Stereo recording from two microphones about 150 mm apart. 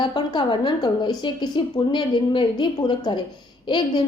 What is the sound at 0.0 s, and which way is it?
A woman's voice, 30° left (ahead or behind).